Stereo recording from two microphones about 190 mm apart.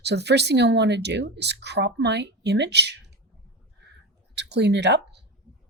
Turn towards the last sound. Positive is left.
turn(degrees=-65)  # may be behind; listen again after turning